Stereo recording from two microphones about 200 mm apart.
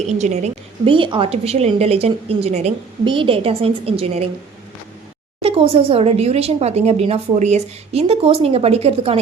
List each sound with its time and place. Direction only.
0.0 s a woman's voice: 35° right (ahead or behind)
5.4 s speech: 25° right (ahead or behind)